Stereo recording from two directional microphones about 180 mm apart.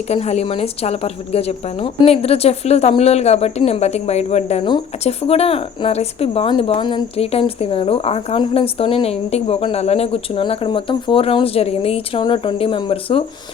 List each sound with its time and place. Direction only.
0.1 s speech: 35° left (ahead or behind)